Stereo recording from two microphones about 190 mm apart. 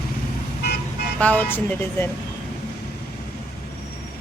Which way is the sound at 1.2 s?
10° left (ahead or behind).